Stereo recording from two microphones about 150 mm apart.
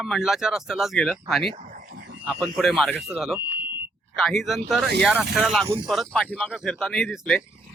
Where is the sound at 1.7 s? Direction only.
60° right (ahead or behind).